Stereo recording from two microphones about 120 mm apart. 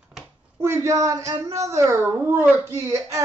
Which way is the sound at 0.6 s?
25° right (ahead or behind).